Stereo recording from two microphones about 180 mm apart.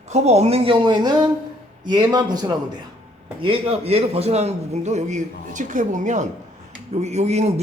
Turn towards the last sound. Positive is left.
turn(degrees=-40)  # may be behind; listen again after turning